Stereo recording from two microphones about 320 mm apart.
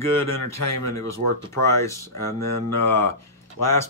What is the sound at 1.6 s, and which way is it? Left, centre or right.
Speech, centre.